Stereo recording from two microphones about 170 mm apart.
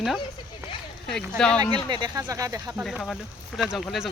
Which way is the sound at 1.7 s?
25° right (ahead or behind).